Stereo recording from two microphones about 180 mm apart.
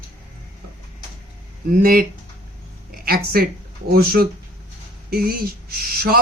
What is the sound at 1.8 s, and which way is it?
Speech, 55° right (ahead or behind).